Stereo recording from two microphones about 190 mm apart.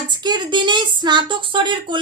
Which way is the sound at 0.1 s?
25° right (ahead or behind).